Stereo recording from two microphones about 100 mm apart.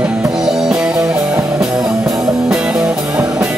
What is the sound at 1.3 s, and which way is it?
Music, 35° right (ahead or behind).